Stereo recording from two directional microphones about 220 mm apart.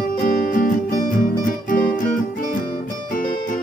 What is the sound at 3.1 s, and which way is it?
Music, 40° left (ahead or behind).